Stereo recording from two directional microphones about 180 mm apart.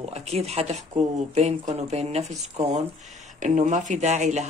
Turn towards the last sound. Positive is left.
turn(degrees=-40)  # may be behind; listen again after turning